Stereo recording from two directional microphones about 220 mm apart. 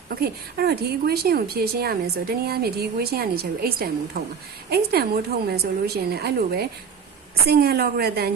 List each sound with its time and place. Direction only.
0.1 s a woman's voice: 45° right (ahead or behind)